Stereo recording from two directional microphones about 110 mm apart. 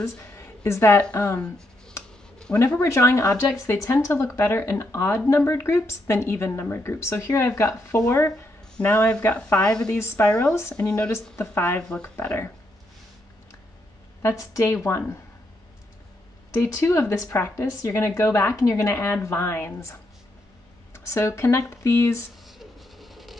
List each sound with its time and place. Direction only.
0.0 s speech: 25° left (ahead or behind)
1.0 s speech: 15° left (ahead or behind)
2.3 s a sound: 5° left (ahead or behind)
2.8 s a woman's voice: 25° left (ahead or behind); by 9.9 s 5° left (ahead or behind)
9.9 s speech: 25° left (ahead or behind)
10.2 s speech: 10° left (ahead or behind)
10.5 s speech: 25° left (ahead or behind)
10.8 s speech: 10° left (ahead or behind)
14.2 s speech: 30° left (ahead or behind)
16.6 s speech: 30° left (ahead or behind)
21.0 s speech: 25° left (ahead or behind)
22.5 s a sound: centre (ahead or behind)